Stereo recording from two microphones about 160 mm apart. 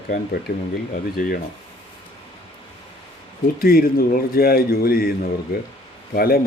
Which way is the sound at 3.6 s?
70° left (ahead or behind).